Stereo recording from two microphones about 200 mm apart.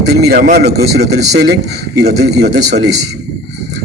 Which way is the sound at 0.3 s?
50° right (ahead or behind).